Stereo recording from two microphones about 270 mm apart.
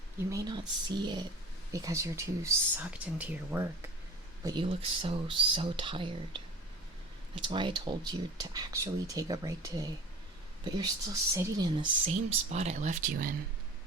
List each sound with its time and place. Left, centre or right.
0.3 s speech: centre
4.4 s speech: centre